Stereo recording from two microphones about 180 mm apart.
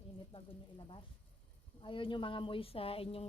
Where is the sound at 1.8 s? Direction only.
30° left (ahead or behind).